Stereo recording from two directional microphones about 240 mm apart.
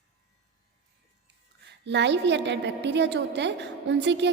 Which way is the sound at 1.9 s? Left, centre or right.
Right.